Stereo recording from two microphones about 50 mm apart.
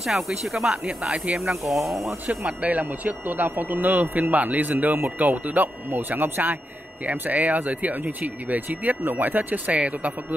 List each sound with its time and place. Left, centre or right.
0.0 s speech: centre
2.2 s speech: right
9.7 s speech: right